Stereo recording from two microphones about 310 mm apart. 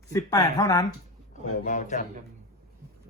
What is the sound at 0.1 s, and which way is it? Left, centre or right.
Speech, centre.